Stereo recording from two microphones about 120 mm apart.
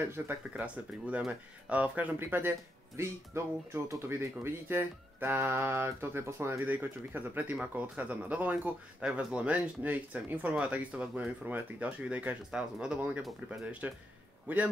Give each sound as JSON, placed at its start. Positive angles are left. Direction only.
{"t": 0.0, "sound": "speech", "side_deg": -20}